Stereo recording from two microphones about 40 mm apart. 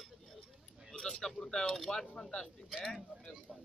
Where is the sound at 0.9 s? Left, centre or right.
Left.